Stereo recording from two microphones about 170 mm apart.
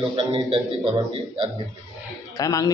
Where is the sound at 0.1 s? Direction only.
30° right (ahead or behind).